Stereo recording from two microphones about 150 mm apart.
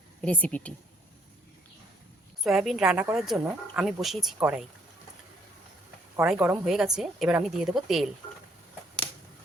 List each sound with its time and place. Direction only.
0.2 s speech: 10° left (ahead or behind)
2.4 s a woman's voice: centre (ahead or behind)
4.4 s speech: 15° right (ahead or behind)
6.1 s a woman's voice: 10° right (ahead or behind)